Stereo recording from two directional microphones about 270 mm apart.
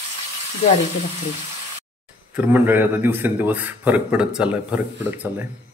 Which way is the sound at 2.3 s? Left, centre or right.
Centre.